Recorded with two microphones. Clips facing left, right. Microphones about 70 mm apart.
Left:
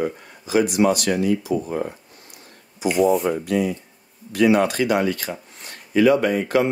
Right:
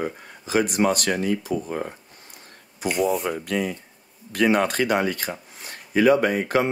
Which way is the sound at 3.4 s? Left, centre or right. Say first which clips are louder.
Left 4 dB; right.